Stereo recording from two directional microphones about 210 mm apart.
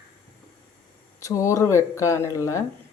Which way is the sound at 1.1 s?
15° left (ahead or behind).